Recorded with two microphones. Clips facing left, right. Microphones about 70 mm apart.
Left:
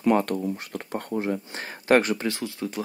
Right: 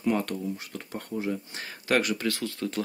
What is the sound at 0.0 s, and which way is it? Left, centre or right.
Speech, left.